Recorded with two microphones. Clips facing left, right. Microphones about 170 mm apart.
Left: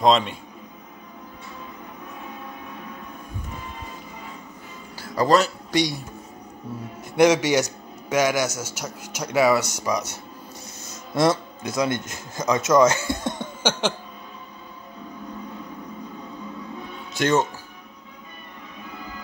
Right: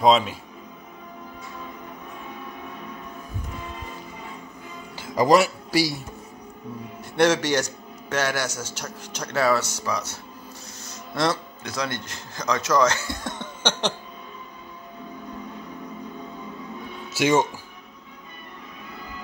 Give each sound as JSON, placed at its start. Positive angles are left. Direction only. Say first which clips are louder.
{"t": 0.0, "sound": "a man's voice", "louder": "even", "side_deg": -5}
{"t": 4.9, "sound": "speech", "louder": "right 1 dB", "side_deg": -15}
{"t": 7.2, "sound": "speech", "louder": "left 3 dB", "side_deg": 10}
{"t": 11.1, "sound": "speech", "louder": "left 4 dB", "side_deg": 20}
{"t": 13.4, "sound": "a sound", "louder": "left 2 dB", "side_deg": 10}
{"t": 17.1, "sound": "speech", "louder": "right 1 dB", "side_deg": -10}